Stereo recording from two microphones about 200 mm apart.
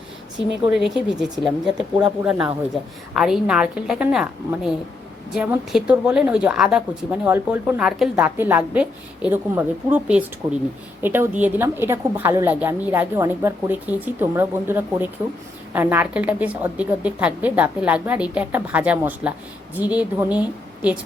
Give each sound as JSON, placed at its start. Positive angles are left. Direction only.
{"t": 0.7, "sound": "a woman's voice", "side_deg": -5}